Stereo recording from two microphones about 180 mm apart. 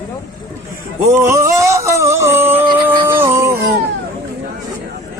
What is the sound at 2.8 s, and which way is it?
Music, 15° right (ahead or behind).